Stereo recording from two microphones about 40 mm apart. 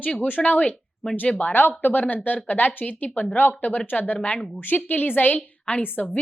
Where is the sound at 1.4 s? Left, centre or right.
Left.